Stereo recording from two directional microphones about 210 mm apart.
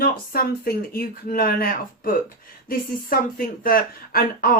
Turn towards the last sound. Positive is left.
turn(degrees=45)  # may be behind; listen again after turning